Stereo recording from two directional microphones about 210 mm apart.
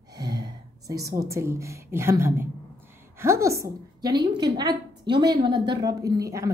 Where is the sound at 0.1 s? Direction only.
20° right (ahead or behind).